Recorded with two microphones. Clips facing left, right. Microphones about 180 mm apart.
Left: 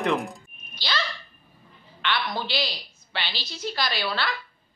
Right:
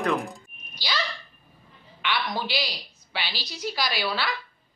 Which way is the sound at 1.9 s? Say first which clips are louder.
Even; 10° right (ahead or behind).